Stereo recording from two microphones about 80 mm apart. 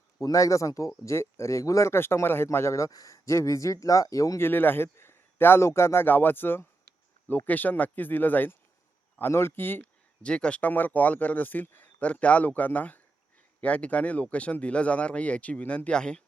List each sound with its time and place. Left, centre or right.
0.2 s speech: left
4.4 s speech: left
10.2 s speech: centre